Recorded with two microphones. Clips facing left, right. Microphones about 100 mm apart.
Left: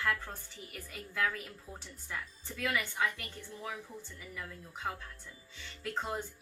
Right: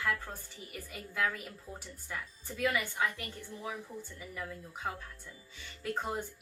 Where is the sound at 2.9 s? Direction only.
10° right (ahead or behind).